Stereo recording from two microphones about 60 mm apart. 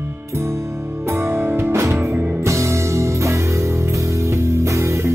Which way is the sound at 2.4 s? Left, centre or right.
Right.